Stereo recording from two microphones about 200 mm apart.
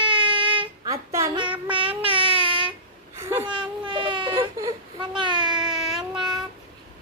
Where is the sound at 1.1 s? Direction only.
20° right (ahead or behind).